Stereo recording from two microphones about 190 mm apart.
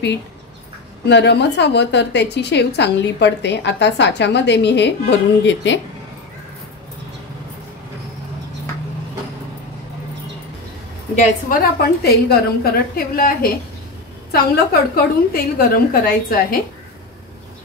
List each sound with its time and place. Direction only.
1.0 s a woman's voice: 65° left (ahead or behind)
11.1 s a woman's voice: 45° left (ahead or behind)